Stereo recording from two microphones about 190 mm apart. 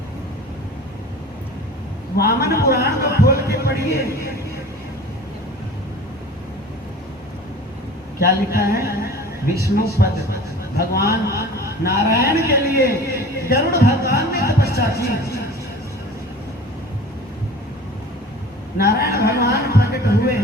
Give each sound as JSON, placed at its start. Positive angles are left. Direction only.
{"t": 2.1, "sound": "a sound", "side_deg": 55}
{"t": 8.2, "sound": "a man's voice", "side_deg": 50}
{"t": 18.8, "sound": "a man's voice", "side_deg": 55}